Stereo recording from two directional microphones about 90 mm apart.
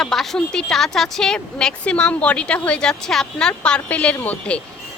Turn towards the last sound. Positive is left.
turn(degrees=20)  # may be behind; listen again after turning